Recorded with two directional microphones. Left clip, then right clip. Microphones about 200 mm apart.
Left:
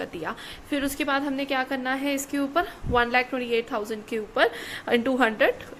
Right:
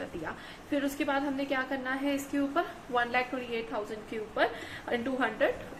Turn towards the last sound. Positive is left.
turn(degrees=55)  # may be behind; listen again after turning